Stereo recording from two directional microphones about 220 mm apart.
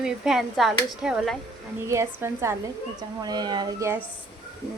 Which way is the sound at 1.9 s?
10° right (ahead or behind).